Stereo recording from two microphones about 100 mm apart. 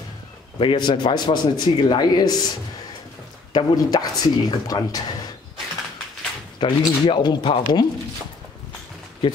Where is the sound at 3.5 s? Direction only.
40° left (ahead or behind).